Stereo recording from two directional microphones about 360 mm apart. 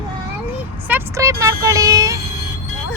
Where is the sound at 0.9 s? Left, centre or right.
Centre.